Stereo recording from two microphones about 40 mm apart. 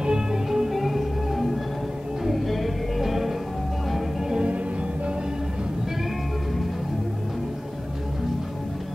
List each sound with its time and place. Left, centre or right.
0.0 s music: centre
0.5 s music: centre